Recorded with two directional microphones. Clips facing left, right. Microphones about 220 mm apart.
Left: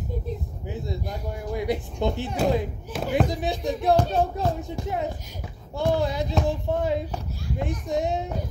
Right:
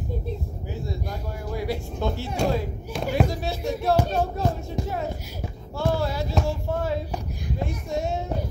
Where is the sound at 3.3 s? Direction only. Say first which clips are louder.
Left 1 dB; 15° left (ahead or behind).